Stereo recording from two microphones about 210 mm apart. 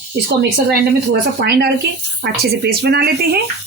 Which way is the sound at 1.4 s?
50° right (ahead or behind).